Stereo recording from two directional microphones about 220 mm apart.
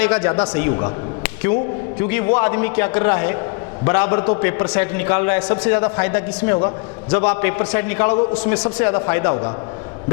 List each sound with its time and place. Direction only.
0.0 s a man's voice: 10° left (ahead or behind)